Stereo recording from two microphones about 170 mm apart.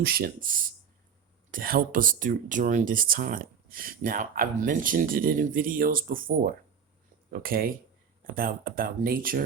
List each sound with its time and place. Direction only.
0.0 s speech: 60° right (ahead or behind)